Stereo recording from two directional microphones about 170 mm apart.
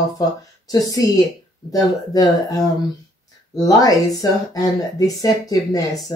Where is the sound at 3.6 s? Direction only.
20° left (ahead or behind).